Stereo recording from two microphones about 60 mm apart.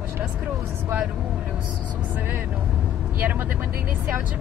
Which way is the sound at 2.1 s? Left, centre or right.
Right.